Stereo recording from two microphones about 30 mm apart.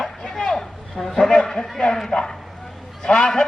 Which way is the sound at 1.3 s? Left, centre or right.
Centre.